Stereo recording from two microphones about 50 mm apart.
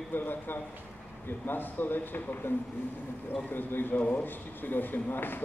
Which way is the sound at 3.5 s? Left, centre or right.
Left.